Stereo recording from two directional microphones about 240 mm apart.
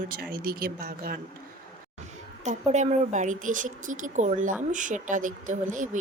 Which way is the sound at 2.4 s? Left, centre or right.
Right.